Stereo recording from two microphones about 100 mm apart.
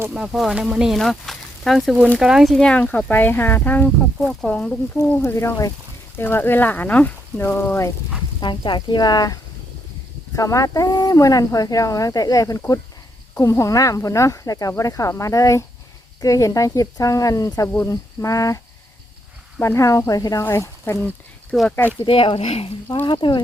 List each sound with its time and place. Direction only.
0.3 s speech: 5° right (ahead or behind); by 4.8 s 15° left (ahead or behind)
5.2 s speech: 25° left (ahead or behind)
6.1 s speech: 20° left (ahead or behind)
8.4 s speech: 50° left (ahead or behind); by 18.6 s 35° left (ahead or behind)
19.6 s speech: 30° left (ahead or behind)
21.5 s speech: centre (ahead or behind)
22.0 s speech: 60° left (ahead or behind); by 22.7 s 80° left
23.0 s speech: 50° left (ahead or behind)